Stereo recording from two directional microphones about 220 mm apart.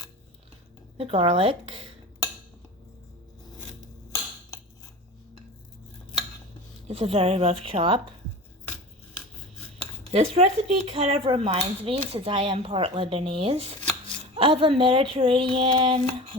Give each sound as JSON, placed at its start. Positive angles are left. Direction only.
{"t": 0.9, "sound": "speech", "side_deg": -25}
{"t": 6.8, "sound": "speech", "side_deg": -25}
{"t": 10.1, "sound": "speech", "side_deg": -25}